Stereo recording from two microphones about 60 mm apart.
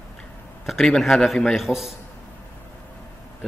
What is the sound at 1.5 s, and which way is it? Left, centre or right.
Speech, centre.